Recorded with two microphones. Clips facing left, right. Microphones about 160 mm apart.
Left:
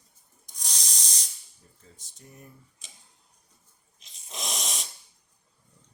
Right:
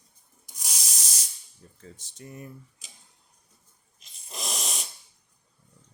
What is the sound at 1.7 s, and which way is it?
Speech, 75° right (ahead or behind).